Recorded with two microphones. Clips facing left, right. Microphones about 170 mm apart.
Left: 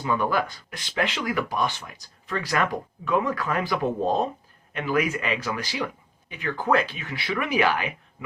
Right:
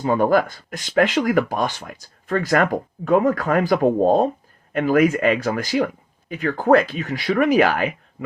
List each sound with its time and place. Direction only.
0.0 s speech: 45° right (ahead or behind)